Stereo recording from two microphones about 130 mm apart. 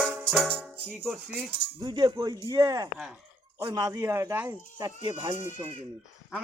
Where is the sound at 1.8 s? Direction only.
35° right (ahead or behind).